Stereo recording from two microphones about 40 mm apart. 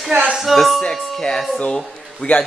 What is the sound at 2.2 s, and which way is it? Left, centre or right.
Speech, left.